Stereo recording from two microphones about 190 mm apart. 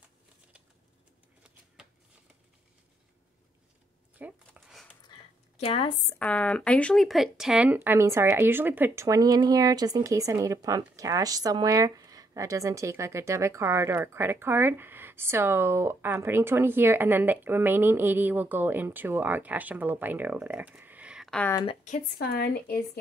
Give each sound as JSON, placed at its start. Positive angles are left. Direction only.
{"t": 4.2, "sound": "a sound", "side_deg": -5}
{"t": 5.6, "sound": "a woman's voice", "side_deg": 30}
{"t": 6.1, "sound": "speech", "side_deg": 5}
{"t": 22.3, "sound": "speech", "side_deg": 55}